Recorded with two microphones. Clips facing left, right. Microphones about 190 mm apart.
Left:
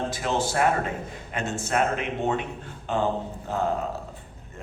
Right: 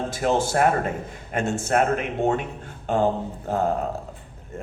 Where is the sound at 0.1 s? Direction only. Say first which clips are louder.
Right 4 dB; 45° right (ahead or behind).